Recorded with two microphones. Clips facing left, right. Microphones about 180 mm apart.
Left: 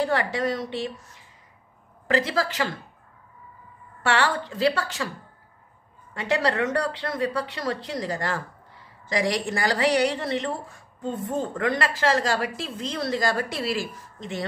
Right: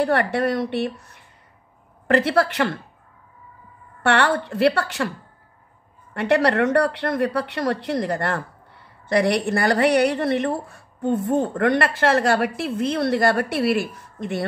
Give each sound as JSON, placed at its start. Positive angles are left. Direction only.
{"t": 0.0, "sound": "speech", "side_deg": -60}
{"t": 4.0, "sound": "speech", "side_deg": -60}
{"t": 6.1, "sound": "speech", "side_deg": -65}